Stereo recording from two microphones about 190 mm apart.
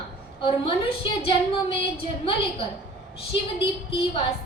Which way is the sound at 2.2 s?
30° left (ahead or behind).